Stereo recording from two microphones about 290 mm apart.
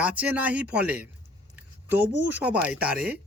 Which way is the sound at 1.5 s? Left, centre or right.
Centre.